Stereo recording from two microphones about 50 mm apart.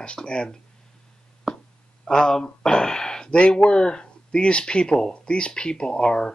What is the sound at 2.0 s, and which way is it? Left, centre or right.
Speech, centre.